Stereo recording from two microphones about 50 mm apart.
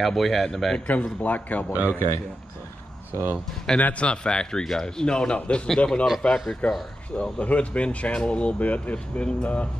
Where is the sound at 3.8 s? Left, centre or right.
Left.